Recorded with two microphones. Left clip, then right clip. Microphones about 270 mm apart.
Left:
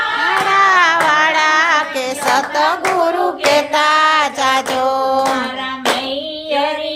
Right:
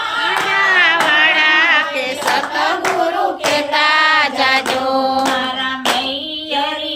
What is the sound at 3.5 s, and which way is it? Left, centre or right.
Music, left.